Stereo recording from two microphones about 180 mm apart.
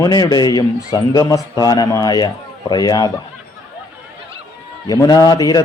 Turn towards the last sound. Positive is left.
turn(degrees=20)  # may be behind; listen again after turning